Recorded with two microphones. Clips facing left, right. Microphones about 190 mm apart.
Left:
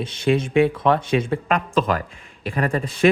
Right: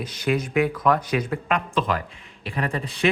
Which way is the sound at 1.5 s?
45° left (ahead or behind).